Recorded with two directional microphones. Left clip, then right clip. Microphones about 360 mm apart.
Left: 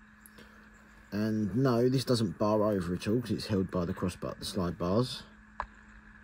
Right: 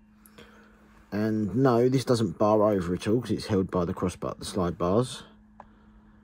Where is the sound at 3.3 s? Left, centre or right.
Centre.